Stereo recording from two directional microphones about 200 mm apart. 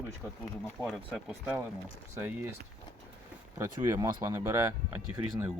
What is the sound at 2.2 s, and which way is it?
Speech, 10° right (ahead or behind).